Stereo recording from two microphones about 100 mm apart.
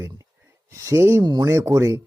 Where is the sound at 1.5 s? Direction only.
30° right (ahead or behind).